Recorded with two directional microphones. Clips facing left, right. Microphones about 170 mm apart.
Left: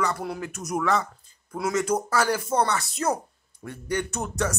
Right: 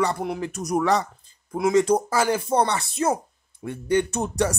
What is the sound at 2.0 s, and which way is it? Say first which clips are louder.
Speech: right 2 dB; 10° right (ahead or behind).